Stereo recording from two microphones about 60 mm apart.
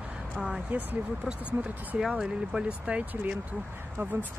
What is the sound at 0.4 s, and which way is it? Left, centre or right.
Speech, right.